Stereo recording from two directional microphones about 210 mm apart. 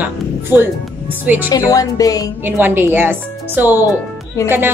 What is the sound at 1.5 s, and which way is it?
Speech, 15° left (ahead or behind).